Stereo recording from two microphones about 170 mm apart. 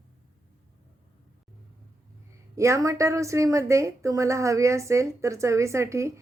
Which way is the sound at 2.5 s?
15° right (ahead or behind).